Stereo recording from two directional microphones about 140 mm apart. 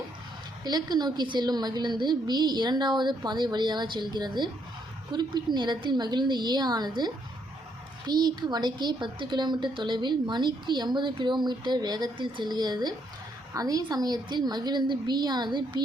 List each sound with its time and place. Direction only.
0.6 s a woman's voice: 30° right (ahead or behind)